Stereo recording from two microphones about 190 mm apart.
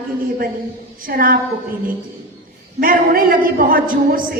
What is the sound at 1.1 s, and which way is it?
Speech, 50° right (ahead or behind).